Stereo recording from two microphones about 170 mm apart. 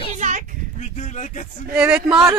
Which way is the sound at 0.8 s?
45° left (ahead or behind).